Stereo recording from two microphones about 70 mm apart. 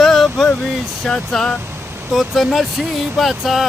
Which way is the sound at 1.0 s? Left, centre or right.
Centre.